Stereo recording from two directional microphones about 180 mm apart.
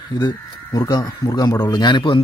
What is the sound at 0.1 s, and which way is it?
Speech, 25° left (ahead or behind).